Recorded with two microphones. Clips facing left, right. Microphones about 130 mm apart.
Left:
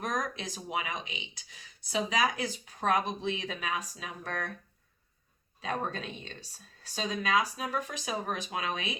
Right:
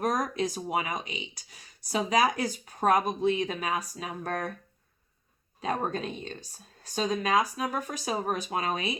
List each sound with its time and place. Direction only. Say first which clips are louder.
0.0 s speech: right 6 dB; 45° right (ahead or behind)
5.5 s speech: right 4 dB; 45° right (ahead or behind)